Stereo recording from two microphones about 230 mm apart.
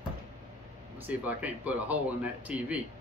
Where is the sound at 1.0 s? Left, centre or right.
Centre.